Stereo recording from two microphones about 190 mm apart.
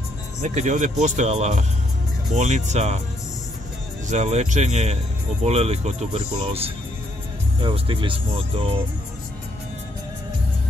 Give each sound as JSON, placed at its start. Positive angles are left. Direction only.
{"t": 0.4, "sound": "speech", "side_deg": -40}
{"t": 4.1, "sound": "speech", "side_deg": -35}